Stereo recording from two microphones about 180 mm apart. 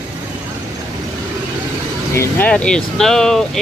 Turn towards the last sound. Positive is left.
turn(degrees=5)  # may be behind; listen again after turning